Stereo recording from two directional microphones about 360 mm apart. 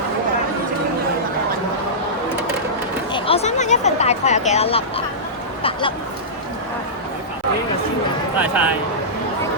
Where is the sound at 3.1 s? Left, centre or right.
Centre.